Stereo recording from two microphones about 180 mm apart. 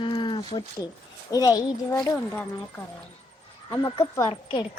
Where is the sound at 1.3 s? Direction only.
20° left (ahead or behind).